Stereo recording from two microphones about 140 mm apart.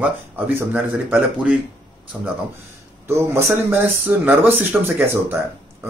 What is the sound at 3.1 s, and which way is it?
Speech, 20° right (ahead or behind).